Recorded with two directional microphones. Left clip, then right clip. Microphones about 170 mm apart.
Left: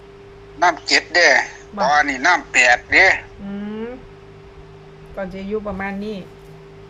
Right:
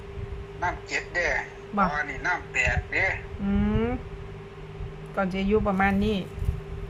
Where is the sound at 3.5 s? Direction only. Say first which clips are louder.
Right 3 dB; 10° right (ahead or behind).